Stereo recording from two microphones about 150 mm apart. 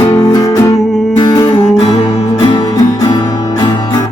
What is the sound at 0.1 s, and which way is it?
Music, 25° left (ahead or behind).